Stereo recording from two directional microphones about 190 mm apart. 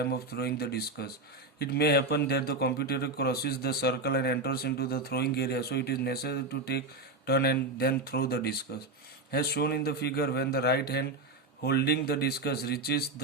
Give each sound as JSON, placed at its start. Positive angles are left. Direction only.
{"t": 0.0, "sound": "a man's voice", "side_deg": 55}